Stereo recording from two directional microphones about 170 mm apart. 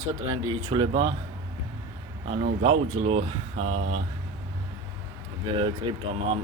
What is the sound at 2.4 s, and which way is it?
Speech, 40° right (ahead or behind).